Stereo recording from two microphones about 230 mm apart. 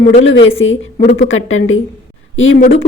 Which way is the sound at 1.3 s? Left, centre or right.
Left.